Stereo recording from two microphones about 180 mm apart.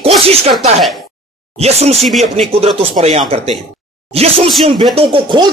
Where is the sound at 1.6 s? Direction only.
35° right (ahead or behind).